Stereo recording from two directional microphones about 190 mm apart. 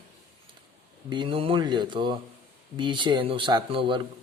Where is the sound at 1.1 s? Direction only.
25° right (ahead or behind).